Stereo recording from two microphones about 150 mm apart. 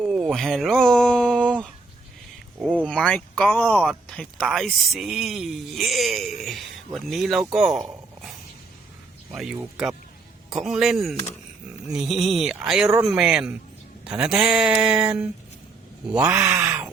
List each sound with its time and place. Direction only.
0.0 s a sound: 5° right (ahead or behind)
2.6 s speech: 10° right (ahead or behind)
2.8 s speech: 5° left (ahead or behind)
9.3 s speech: centre (ahead or behind)
16.3 s speech: 20° right (ahead or behind)
16.6 s a sound: 5° right (ahead or behind)